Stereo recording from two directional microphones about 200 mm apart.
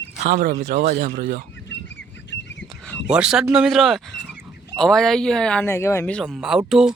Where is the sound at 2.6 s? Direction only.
5° left (ahead or behind).